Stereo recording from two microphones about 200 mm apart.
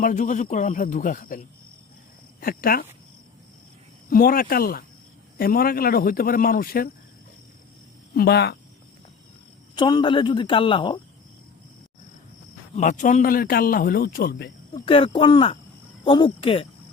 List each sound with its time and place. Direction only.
0.0 s speech: 40° left (ahead or behind)
2.4 s a man's voice: 45° left (ahead or behind)
4.1 s a man's voice: 45° left (ahead or behind)
8.1 s a man's voice: 50° left (ahead or behind)
9.7 s speech: 25° left (ahead or behind)
12.7 s a man's voice: 40° left (ahead or behind); by 14.5 s 55° left (ahead or behind)
14.8 s speech: 25° left (ahead or behind)